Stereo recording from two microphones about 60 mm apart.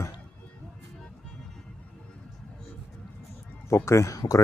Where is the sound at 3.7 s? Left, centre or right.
Left.